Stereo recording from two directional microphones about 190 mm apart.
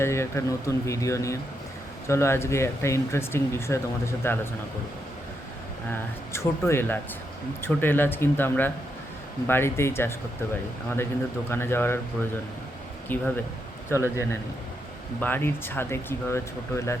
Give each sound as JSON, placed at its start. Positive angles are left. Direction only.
{"t": 0.0, "sound": "speech", "side_deg": 15}
{"t": 5.9, "sound": "speech", "side_deg": 15}
{"t": 11.5, "sound": "speech", "side_deg": 10}
{"t": 13.1, "sound": "speech", "side_deg": 10}